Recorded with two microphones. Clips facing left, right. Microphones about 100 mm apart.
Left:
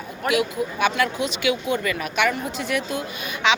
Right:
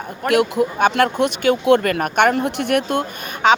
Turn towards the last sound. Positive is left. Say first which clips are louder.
# right 6 dB
turn(degrees=-45)  # may be behind; listen again after turning